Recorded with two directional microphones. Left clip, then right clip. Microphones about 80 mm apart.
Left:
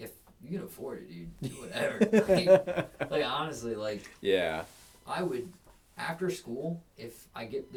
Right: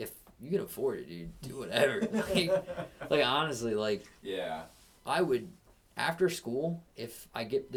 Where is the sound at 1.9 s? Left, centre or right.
Left.